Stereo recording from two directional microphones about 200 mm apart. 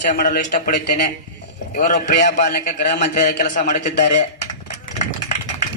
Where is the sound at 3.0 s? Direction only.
40° left (ahead or behind).